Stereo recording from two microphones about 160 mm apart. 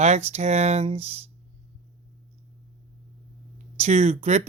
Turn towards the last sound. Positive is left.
turn(degrees=-45)  # may be behind; listen again after turning